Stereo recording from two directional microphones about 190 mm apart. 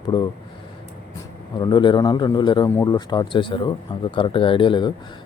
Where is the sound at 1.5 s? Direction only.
25° left (ahead or behind).